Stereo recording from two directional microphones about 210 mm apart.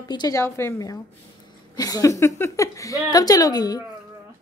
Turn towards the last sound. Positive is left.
turn(degrees=20)  # may be behind; listen again after turning